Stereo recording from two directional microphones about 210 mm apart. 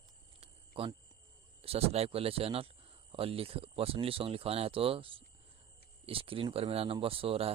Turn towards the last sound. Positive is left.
turn(degrees=-25)  # may be behind; listen again after turning